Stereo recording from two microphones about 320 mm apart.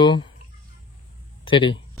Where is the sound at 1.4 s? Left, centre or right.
Centre.